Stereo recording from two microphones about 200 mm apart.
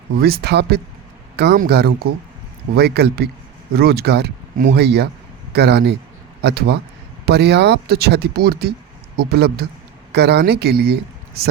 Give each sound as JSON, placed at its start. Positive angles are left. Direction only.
{"t": 0.2, "sound": "speech", "side_deg": -50}